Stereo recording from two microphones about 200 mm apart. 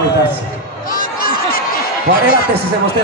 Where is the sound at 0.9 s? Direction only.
45° left (ahead or behind).